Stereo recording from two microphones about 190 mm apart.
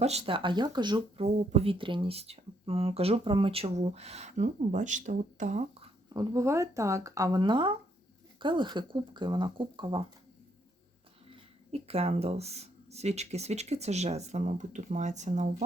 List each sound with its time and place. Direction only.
0.0 s speech: 35° right (ahead or behind)
6.1 s speech: 15° right (ahead or behind)
11.7 s speech: 30° right (ahead or behind)